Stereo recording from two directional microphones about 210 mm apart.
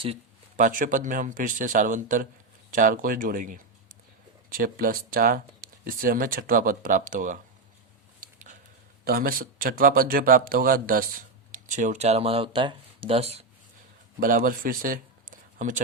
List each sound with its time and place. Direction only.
0.0 s speech: 30° right (ahead or behind)
9.0 s speech: 45° right (ahead or behind); by 13.4 s 30° right (ahead or behind)
14.2 s speech: 40° right (ahead or behind)